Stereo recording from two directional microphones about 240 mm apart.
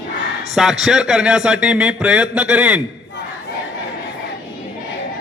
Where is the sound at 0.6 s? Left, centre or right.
Centre.